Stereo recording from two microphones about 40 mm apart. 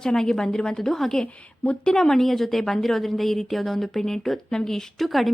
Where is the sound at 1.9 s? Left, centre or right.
Centre.